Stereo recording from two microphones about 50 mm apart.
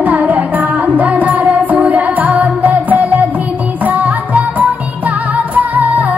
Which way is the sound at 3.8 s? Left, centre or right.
Right.